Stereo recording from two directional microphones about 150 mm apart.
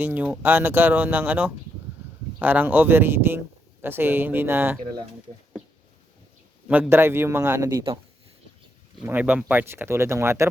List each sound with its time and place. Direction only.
0.0 s speech: 10° right (ahead or behind)
6.7 s speech: 10° right (ahead or behind)
9.0 s speech: 10° right (ahead or behind)